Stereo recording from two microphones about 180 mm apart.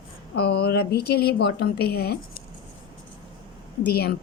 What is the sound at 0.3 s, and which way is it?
A woman's voice, 65° left (ahead or behind).